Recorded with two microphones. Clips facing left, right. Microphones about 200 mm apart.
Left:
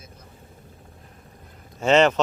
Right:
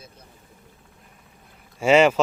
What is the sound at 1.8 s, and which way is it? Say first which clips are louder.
Speech: right 1 dB; 10° right (ahead or behind).